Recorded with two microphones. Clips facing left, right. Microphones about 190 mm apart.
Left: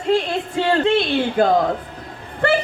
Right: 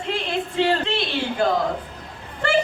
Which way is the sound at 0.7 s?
50° left (ahead or behind).